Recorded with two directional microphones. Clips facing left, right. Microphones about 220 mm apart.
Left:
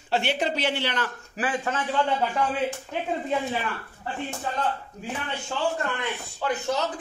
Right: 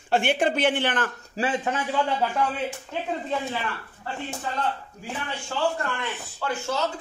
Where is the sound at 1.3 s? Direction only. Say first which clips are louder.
Right 2 dB; 25° right (ahead or behind).